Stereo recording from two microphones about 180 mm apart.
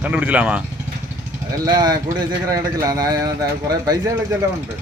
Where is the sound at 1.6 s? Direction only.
20° right (ahead or behind).